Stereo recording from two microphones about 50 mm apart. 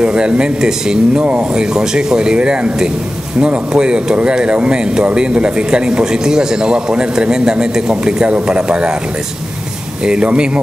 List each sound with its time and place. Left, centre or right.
0.0 s speech: centre
10.0 s speech: centre